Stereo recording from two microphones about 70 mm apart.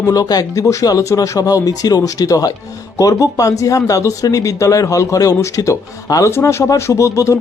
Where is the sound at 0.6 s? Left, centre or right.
Left.